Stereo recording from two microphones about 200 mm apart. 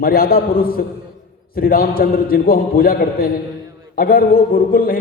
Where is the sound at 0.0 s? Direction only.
50° left (ahead or behind).